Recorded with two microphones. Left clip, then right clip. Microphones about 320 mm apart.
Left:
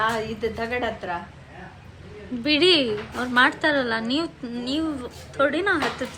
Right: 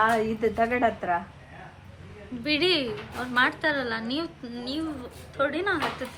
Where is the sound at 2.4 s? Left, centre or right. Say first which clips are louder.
Left 6 dB; centre.